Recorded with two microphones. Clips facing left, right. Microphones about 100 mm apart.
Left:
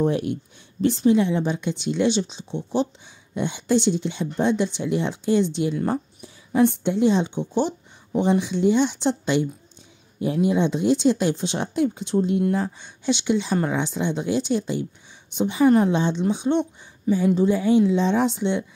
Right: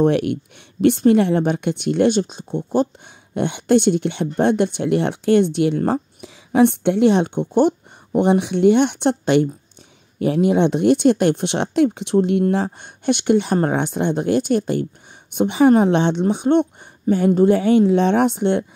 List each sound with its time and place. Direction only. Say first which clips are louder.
0.0 s speech: right 5 dB; 70° right (ahead or behind); by 2.9 s 50° right (ahead or behind)
3.3 s speech: right 5 dB; 60° right (ahead or behind)
10.1 s speech: right 5 dB; 70° right (ahead or behind)
15.3 s speech: right 4 dB; 65° right (ahead or behind)